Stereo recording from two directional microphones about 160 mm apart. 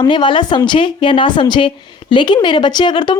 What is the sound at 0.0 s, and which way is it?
A woman's voice, 30° left (ahead or behind).